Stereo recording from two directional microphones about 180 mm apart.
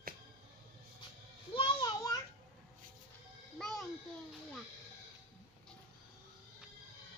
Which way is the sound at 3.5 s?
5° left (ahead or behind).